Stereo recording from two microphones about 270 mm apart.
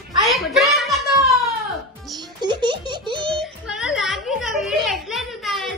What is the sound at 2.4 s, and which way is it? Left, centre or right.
Giggle, centre.